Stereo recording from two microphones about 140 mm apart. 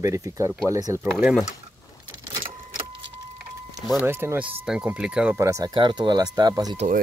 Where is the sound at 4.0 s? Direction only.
15° right (ahead or behind).